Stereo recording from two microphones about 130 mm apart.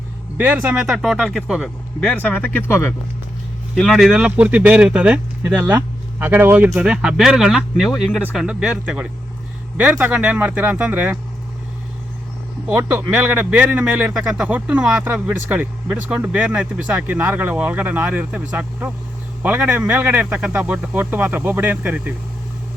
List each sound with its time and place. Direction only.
0.3 s speech: 10° right (ahead or behind); by 2.9 s 20° left (ahead or behind)
3.8 s speech: centre (ahead or behind)
12.6 s speech: 10° right (ahead or behind)